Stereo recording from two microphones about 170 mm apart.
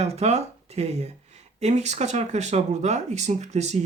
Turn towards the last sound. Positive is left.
turn(degrees=-40)  # may be behind; listen again after turning